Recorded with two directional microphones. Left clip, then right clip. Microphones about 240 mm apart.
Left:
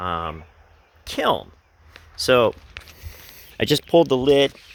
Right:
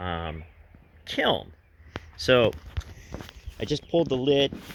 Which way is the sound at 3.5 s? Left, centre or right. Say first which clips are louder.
Left 9 dB; left.